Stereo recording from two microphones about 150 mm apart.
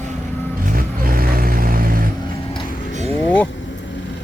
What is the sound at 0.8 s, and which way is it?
Vehicle, 75° right (ahead or behind).